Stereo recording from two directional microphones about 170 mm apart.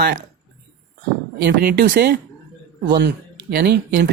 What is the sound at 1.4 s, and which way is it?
Speech, 70° right (ahead or behind).